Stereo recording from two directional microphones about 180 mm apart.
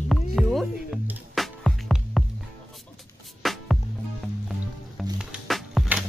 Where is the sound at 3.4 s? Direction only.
Centre (ahead or behind).